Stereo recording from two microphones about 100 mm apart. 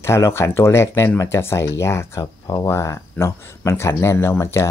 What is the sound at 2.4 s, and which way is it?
Speech, 40° left (ahead or behind).